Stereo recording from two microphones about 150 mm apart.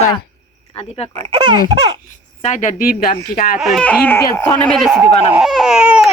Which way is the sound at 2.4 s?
55° left (ahead or behind).